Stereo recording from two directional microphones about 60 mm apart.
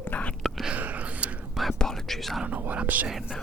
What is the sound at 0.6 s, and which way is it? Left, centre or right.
Whispering, right.